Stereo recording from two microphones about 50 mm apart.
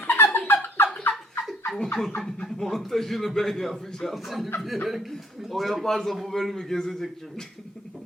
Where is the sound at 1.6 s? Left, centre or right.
Centre.